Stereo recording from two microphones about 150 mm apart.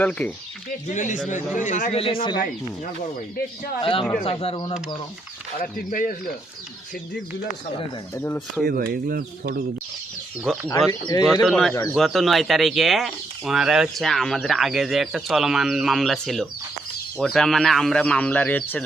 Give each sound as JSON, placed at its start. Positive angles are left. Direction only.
{"t": 0.0, "sound": "speech", "side_deg": 10}
{"t": 0.9, "sound": "a man's voice", "side_deg": 55}
{"t": 3.8, "sound": "speech", "side_deg": 35}
{"t": 5.7, "sound": "speech", "side_deg": 65}
{"t": 8.1, "sound": "speech", "side_deg": 15}
{"t": 8.6, "sound": "speech", "side_deg": -90}
{"t": 10.7, "sound": "speech", "side_deg": 25}
{"t": 11.4, "sound": "speech", "side_deg": 0}